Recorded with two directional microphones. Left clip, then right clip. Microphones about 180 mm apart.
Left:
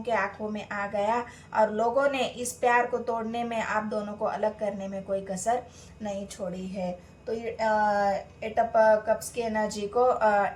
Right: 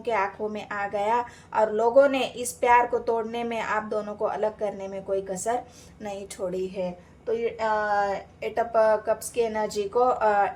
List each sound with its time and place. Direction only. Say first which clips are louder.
0.0 s a woman's voice: right 2 dB; 45° right (ahead or behind)